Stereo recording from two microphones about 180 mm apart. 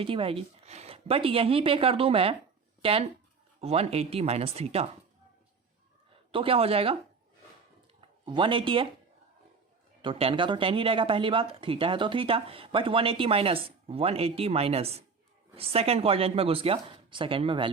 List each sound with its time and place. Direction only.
0.0 s speech: 30° right (ahead or behind)
3.6 s speech: 35° right (ahead or behind)
6.3 s speech: 30° right (ahead or behind)
8.2 s speech: 25° right (ahead or behind)
10.0 s speech: 30° right (ahead or behind)